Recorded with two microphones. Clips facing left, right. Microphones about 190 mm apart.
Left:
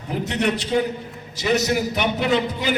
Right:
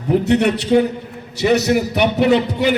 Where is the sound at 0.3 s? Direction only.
60° right (ahead or behind).